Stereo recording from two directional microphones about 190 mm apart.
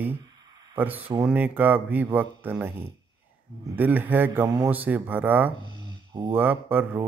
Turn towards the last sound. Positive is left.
turn(degrees=-10)  # may be behind; listen again after turning